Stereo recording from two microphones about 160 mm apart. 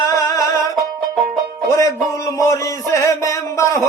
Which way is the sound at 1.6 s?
20° left (ahead or behind).